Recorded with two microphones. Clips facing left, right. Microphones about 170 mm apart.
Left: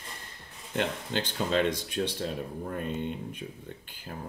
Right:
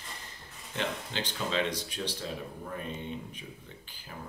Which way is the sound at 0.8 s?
50° left (ahead or behind).